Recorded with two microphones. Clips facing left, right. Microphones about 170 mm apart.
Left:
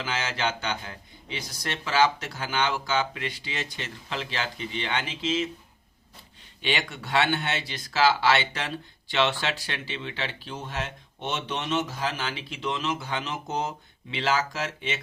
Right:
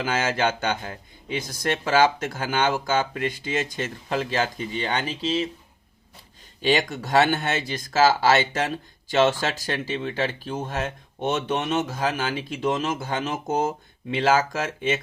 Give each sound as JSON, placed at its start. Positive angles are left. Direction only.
{"t": 0.0, "sound": "speech", "side_deg": -50}
{"t": 6.6, "sound": "speech", "side_deg": -40}